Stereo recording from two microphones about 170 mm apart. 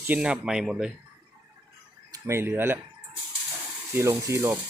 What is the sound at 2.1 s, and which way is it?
Speech, 15° right (ahead or behind).